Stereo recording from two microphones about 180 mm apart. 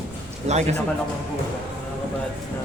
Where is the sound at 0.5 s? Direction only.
40° right (ahead or behind).